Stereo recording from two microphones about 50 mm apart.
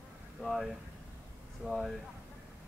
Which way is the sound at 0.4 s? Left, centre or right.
Centre.